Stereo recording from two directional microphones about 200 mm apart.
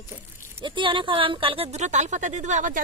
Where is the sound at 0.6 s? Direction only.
25° right (ahead or behind).